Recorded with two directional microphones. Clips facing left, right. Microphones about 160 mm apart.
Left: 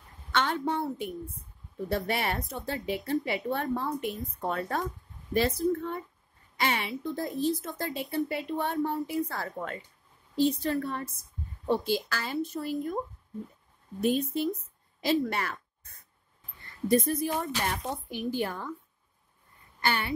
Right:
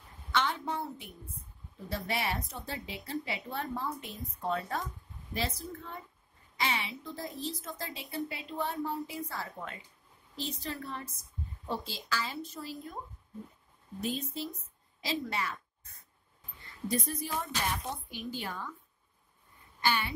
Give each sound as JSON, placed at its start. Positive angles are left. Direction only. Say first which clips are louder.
{"t": 0.3, "sound": "a woman's voice", "louder": "left 4 dB", "side_deg": 55}
{"t": 14.0, "sound": "a woman's voice", "louder": "left 9 dB", "side_deg": 60}
{"t": 16.8, "sound": "a woman's voice", "louder": "left 9 dB", "side_deg": 55}
{"t": 19.9, "sound": "a woman's voice", "louder": "left 2 dB", "side_deg": 65}